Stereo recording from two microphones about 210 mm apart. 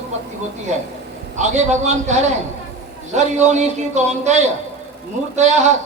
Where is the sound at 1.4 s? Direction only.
35° right (ahead or behind).